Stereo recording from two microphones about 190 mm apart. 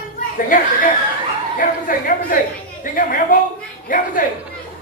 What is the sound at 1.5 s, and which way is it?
A woman's voice, 45° left (ahead or behind).